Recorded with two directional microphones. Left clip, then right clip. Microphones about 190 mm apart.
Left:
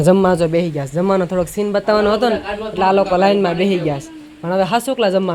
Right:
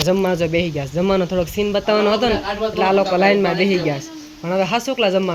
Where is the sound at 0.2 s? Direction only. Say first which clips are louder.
Left 4 dB; 20° left (ahead or behind).